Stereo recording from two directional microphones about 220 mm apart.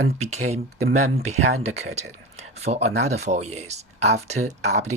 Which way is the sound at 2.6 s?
30° right (ahead or behind).